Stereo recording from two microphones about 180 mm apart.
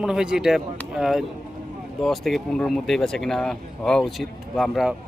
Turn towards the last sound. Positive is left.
turn(degrees=0)  # may be behind; listen again after turning